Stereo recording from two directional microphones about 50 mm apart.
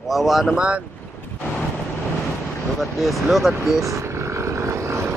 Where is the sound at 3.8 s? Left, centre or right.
Right.